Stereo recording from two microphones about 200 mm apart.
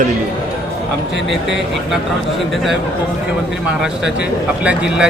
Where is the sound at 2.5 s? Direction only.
Centre (ahead or behind).